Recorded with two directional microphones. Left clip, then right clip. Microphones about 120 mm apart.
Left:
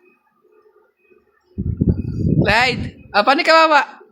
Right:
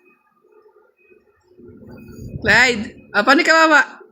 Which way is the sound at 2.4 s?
35° left (ahead or behind).